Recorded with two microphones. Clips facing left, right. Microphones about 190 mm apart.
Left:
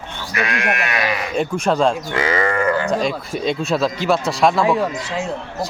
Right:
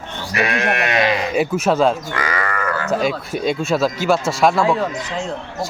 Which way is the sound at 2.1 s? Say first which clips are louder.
Left 5 dB; 25° left (ahead or behind).